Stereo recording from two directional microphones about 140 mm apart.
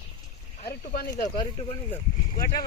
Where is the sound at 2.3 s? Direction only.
90° left.